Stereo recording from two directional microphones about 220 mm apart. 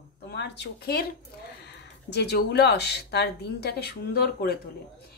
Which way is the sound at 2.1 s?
50° left (ahead or behind).